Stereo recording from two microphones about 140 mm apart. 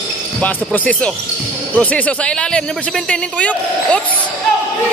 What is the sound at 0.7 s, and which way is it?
A man's voice, 10° left (ahead or behind).